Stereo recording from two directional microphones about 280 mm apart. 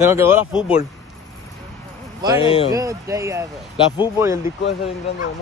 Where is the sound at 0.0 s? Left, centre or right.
Centre.